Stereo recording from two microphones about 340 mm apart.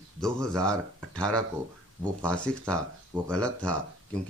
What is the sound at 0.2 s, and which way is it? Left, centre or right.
Speech, centre.